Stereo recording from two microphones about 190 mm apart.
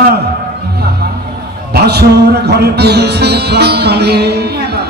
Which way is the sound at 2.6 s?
60° right (ahead or behind).